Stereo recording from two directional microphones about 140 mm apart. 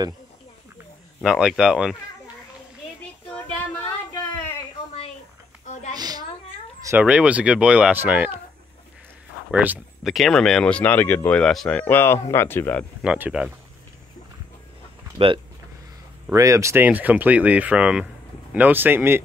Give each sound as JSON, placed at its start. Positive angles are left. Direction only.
{"t": 1.2, "sound": "speech", "side_deg": 0}
{"t": 3.3, "sound": "child singing", "side_deg": 10}
{"t": 5.9, "sound": "a sound", "side_deg": -30}
{"t": 7.0, "sound": "speech", "side_deg": -10}
{"t": 9.5, "sound": "speech", "side_deg": -10}
{"t": 10.0, "sound": "speech", "side_deg": 0}
{"t": 13.0, "sound": "speech", "side_deg": -5}
{"t": 15.1, "sound": "speech", "side_deg": -40}
{"t": 16.3, "sound": "speech", "side_deg": -20}